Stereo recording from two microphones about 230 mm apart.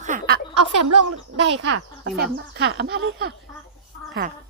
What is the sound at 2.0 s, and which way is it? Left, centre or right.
Speech, right.